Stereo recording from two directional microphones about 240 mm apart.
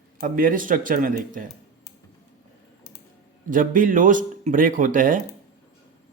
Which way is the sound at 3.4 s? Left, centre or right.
Right.